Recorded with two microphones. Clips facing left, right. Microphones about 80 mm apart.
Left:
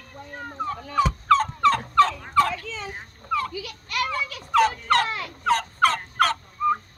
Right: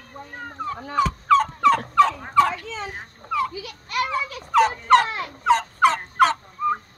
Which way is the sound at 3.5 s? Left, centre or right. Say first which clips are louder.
Right 2 dB; right.